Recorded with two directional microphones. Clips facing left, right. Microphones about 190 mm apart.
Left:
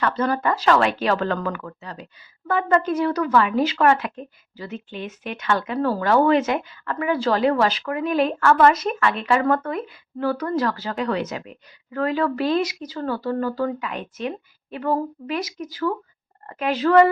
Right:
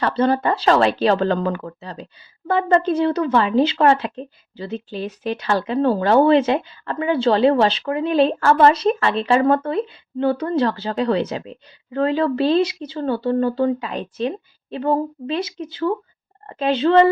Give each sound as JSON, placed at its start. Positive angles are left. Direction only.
{"t": 0.0, "sound": "speech", "side_deg": -30}